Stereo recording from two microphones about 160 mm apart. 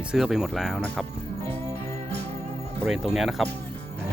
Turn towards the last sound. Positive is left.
turn(degrees=0)  # may be behind; listen again after turning